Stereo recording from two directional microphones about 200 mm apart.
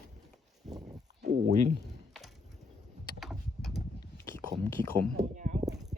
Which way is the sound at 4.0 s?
15° left (ahead or behind).